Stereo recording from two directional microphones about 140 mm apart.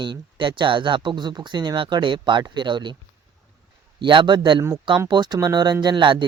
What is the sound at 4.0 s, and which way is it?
Speech, 35° right (ahead or behind).